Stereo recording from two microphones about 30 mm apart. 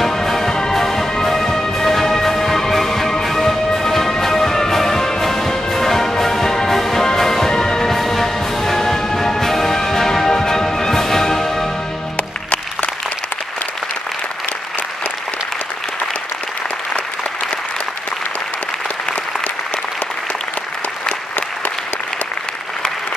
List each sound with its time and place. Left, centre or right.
0.1 s music: centre
7.9 s music: centre
12.2 s music: left